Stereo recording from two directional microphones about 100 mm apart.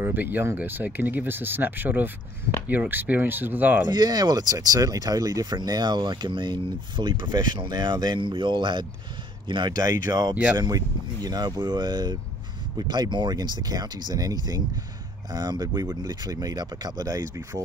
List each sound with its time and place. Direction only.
0.0 s speech: 20° right (ahead or behind)
3.8 s speech: 45° right (ahead or behind)
10.3 s speech: 15° right (ahead or behind)
11.2 s speech: 40° right (ahead or behind)